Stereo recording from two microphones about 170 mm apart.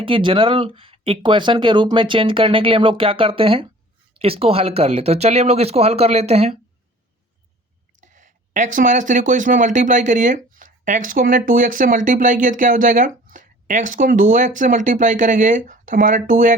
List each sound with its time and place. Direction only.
0.0 s speech: 30° right (ahead or behind)
8.0 s speech: 45° right (ahead or behind)